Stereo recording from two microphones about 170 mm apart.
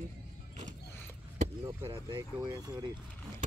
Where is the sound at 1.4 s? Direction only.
35° right (ahead or behind).